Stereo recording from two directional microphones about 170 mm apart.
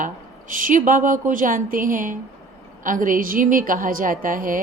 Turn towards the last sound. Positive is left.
turn(degrees=-50)  # may be behind; listen again after turning